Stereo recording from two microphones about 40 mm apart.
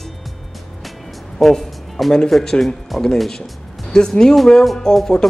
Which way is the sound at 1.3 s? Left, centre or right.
Centre.